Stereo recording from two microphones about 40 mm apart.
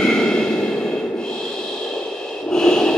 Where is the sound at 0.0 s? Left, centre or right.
Centre.